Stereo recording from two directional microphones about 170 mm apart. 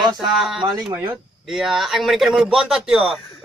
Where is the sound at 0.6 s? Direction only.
30° right (ahead or behind).